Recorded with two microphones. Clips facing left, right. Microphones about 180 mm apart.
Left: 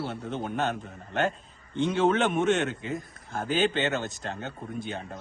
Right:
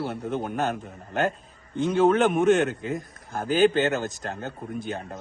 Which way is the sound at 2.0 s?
Centre (ahead or behind).